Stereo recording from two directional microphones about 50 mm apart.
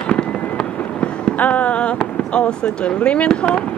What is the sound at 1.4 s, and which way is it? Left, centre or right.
Fireworks, left.